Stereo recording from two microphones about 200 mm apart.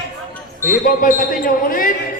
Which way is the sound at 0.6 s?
40° left (ahead or behind).